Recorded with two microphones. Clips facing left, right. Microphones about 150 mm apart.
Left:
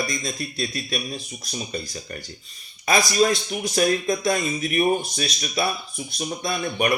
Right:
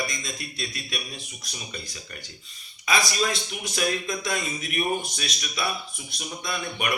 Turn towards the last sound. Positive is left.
turn(degrees=40)  # may be behind; listen again after turning